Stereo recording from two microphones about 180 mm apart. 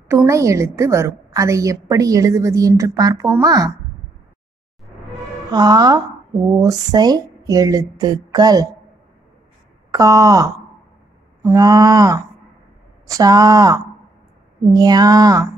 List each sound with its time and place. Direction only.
0.1 s a woman's voice: 15° right (ahead or behind)
5.5 s speech: 25° right (ahead or behind)
9.8 s speech: 20° right (ahead or behind)